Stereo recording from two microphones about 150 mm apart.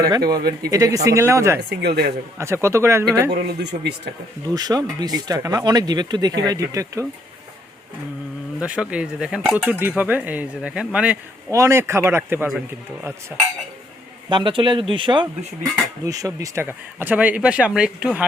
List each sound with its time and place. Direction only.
0.6 s speech: 20° right (ahead or behind)
1.5 s speech: 90° right
2.4 s speech: 20° right (ahead or behind)
3.3 s speech: 90° right
4.4 s speech: 25° right (ahead or behind)
8.6 s speech: 5° right (ahead or behind)
11.5 s speech: 20° right (ahead or behind)
12.5 s speech: 5° right (ahead or behind)
14.3 s speech: 30° right (ahead or behind); by 18.3 s 5° right (ahead or behind)